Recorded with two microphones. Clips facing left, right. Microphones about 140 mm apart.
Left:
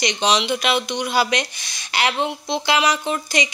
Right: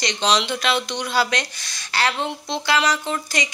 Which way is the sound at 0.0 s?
10° left (ahead or behind).